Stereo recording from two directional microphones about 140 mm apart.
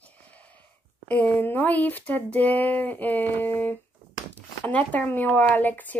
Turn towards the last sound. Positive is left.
turn(degrees=10)  # may be behind; listen again after turning